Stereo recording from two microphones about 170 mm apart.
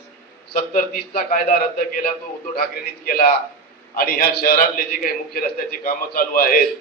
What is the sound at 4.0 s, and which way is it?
A man's voice, 60° left (ahead or behind).